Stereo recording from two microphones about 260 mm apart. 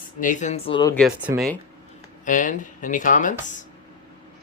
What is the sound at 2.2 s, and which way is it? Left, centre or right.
Speech, left.